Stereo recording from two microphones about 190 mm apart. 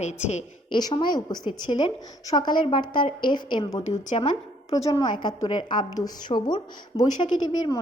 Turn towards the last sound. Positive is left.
turn(degrees=25)  # may be behind; listen again after turning